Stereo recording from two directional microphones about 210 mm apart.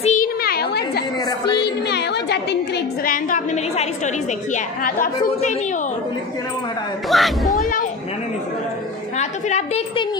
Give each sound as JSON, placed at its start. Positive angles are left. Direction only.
{"t": 0.0, "sound": "a sound", "side_deg": 35}
{"t": 3.1, "sound": "a woman's voice", "side_deg": 40}
{"t": 7.1, "sound": "speech", "side_deg": 0}
{"t": 9.2, "sound": "a woman's voice", "side_deg": 35}